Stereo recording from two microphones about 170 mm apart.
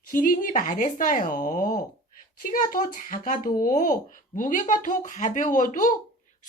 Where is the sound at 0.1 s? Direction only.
55° left (ahead or behind).